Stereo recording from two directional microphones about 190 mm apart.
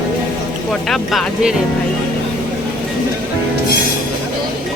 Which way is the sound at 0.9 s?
Centre (ahead or behind).